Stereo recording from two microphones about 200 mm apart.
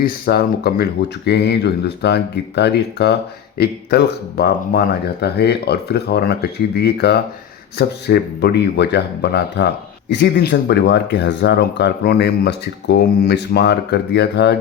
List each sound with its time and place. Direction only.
0.0 s speech: 50° left (ahead or behind)